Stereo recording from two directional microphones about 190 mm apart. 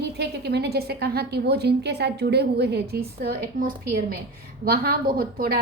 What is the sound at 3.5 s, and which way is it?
A woman's voice, 45° right (ahead or behind).